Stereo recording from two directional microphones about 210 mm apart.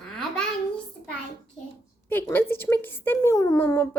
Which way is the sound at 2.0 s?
10° left (ahead or behind).